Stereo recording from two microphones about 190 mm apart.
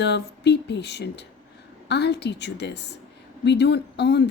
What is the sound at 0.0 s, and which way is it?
Speech, 65° left (ahead or behind).